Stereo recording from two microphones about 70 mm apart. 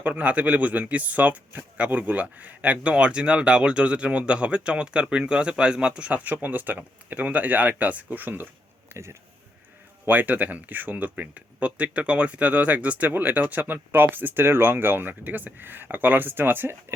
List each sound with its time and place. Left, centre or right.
0.0 s speech: centre
8.9 s speech: right
10.1 s speech: right